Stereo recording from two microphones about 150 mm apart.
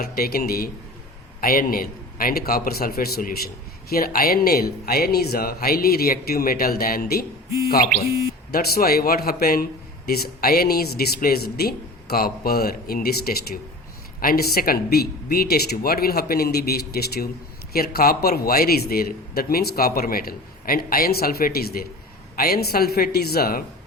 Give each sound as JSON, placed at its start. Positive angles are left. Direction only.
{"t": 0.0, "sound": "a man's voice", "side_deg": 85}
{"t": 1.4, "sound": "a man's voice", "side_deg": 75}
{"t": 8.5, "sound": "a man's voice", "side_deg": 90}